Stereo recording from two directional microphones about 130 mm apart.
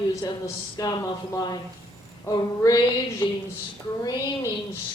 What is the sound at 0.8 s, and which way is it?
Speech, 25° left (ahead or behind).